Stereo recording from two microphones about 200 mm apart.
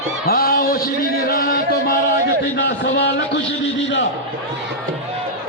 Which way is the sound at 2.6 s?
60° left (ahead or behind).